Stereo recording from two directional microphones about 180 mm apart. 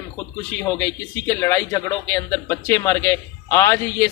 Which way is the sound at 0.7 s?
15° left (ahead or behind).